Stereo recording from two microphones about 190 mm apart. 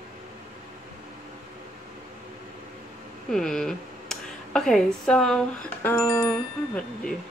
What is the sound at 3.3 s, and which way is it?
Speech, centre (ahead or behind).